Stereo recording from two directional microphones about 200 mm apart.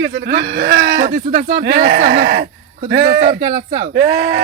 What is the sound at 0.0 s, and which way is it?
Speech, 50° right (ahead or behind).